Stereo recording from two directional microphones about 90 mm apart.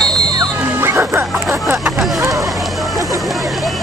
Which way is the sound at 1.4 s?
5° right (ahead or behind).